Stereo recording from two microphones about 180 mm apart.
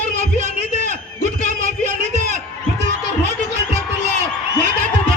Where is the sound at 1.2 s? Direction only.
40° right (ahead or behind).